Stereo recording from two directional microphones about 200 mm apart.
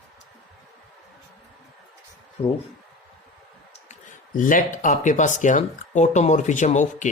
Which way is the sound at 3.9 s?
40° left (ahead or behind).